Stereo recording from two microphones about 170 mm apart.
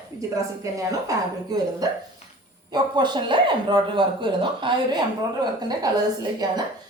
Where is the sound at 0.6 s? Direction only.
20° right (ahead or behind).